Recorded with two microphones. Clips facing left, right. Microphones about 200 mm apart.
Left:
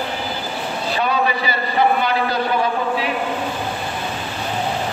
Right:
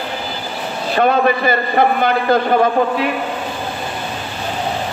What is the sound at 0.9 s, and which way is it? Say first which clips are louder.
A man's voice: right 7 dB; 50° right (ahead or behind).